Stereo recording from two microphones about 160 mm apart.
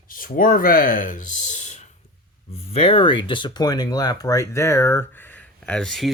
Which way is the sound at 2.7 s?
35° left (ahead or behind).